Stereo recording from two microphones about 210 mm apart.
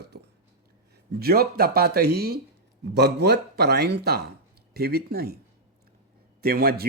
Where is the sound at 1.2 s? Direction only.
45° right (ahead or behind).